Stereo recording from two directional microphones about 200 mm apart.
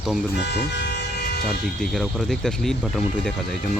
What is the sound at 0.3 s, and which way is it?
Toot, 55° left (ahead or behind).